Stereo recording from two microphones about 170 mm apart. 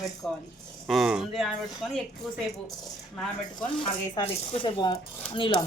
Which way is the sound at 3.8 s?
30° left (ahead or behind).